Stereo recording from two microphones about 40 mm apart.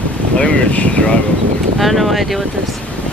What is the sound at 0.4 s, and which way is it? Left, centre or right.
Wind noise, left.